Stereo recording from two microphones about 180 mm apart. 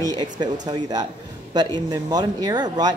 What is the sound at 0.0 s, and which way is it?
Speech, 25° right (ahead or behind).